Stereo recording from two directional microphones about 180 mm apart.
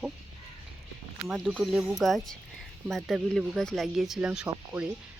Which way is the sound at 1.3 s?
5° right (ahead or behind).